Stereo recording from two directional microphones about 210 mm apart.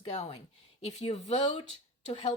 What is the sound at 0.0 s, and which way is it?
Speech, 25° left (ahead or behind).